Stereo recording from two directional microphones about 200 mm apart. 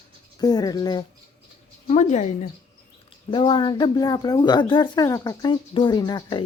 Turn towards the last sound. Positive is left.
turn(degrees=20)  # may be behind; listen again after turning